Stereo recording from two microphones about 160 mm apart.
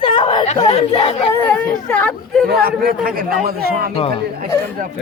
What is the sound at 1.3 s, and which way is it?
Speech, 10° left (ahead or behind).